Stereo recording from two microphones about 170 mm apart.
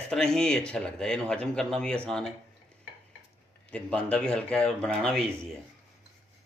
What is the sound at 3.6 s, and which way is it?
Speech, 5° left (ahead or behind).